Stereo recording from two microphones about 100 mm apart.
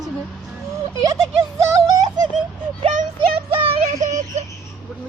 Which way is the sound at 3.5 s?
65° right (ahead or behind).